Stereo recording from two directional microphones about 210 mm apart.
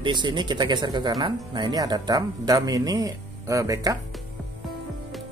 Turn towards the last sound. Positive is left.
turn(degrees=-15)  # may be behind; listen again after turning